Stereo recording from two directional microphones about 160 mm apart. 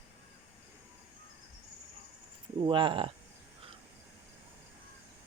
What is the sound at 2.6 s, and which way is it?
Speech, 30° right (ahead or behind).